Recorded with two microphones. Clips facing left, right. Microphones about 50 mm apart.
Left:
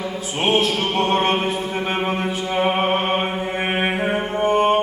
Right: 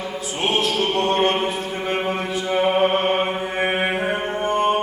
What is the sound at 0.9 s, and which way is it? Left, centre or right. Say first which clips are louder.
Mantra: left 2 dB; left.